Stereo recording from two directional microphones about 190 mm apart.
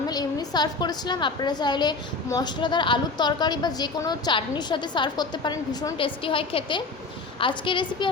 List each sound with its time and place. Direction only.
0.1 s a woman's voice: 20° left (ahead or behind)